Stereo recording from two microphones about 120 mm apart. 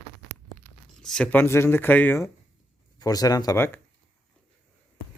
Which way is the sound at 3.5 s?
20° left (ahead or behind).